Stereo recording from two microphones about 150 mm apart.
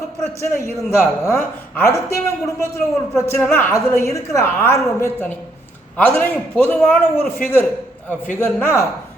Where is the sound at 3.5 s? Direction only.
15° left (ahead or behind).